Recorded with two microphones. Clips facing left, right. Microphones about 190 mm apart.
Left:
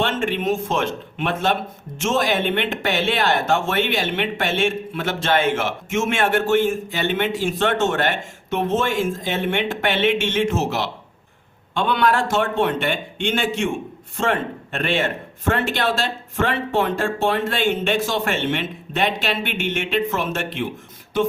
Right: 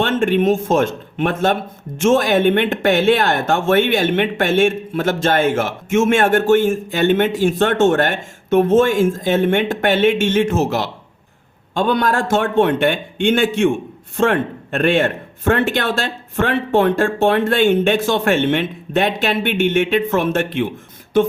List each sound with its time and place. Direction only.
0.0 s speech: 50° right (ahead or behind)